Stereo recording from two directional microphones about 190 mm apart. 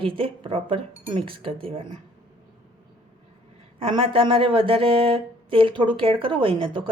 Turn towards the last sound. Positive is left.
turn(degrees=-25)  # may be behind; listen again after turning